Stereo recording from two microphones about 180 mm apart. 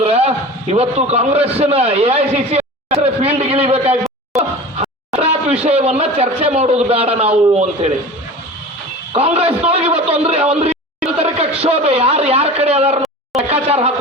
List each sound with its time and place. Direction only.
0.0 s a sound: 35° right (ahead or behind)
1.4 s a man's voice: 35° right (ahead or behind)
9.1 s a man's voice: 35° right (ahead or behind)